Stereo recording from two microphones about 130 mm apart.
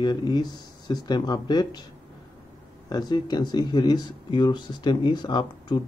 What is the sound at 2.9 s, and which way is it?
Speech, 35° left (ahead or behind).